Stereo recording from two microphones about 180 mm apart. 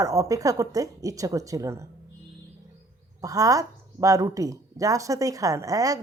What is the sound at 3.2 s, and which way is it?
Speech, 20° right (ahead or behind).